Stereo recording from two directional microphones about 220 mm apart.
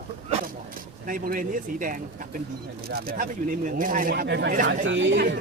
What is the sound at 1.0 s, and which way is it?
Speech, 35° right (ahead or behind).